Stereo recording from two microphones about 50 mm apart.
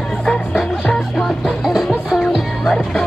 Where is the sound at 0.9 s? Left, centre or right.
Centre.